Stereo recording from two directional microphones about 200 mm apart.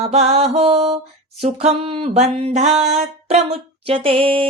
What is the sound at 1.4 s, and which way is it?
Speech, 30° right (ahead or behind).